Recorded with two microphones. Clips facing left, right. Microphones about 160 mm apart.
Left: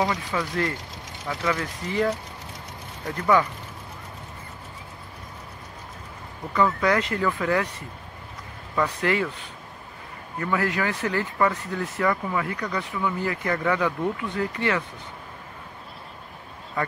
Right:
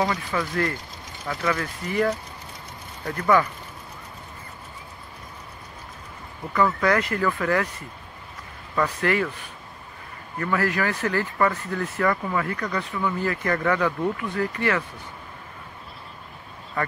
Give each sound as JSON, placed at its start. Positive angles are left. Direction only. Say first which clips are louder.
{"t": 0.0, "sound": "speech", "louder": "right 1 dB", "side_deg": 15}
{"t": 6.5, "sound": "speech", "louder": "even", "side_deg": 15}
{"t": 8.7, "sound": "speech", "louder": "right 1 dB", "side_deg": 15}